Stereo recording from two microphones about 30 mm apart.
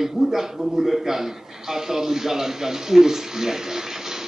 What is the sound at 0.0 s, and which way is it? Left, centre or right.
A man's voice, centre.